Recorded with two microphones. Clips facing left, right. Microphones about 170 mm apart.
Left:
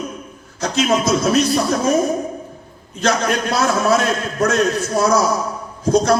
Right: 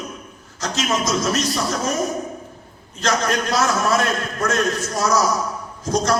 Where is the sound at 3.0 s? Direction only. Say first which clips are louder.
Left 3 dB; 60° left (ahead or behind).